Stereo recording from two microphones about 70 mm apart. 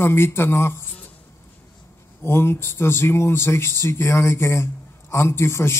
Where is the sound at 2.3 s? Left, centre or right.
Left.